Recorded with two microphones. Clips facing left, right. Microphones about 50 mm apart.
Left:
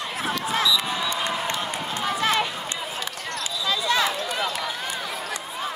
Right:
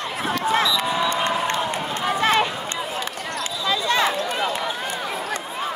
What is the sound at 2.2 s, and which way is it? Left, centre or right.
Run, right.